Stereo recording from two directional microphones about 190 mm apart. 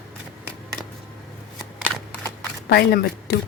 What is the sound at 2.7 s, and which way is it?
Speech, 60° left (ahead or behind).